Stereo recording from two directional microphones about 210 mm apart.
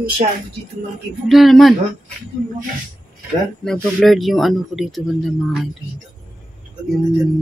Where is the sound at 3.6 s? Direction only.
5° left (ahead or behind).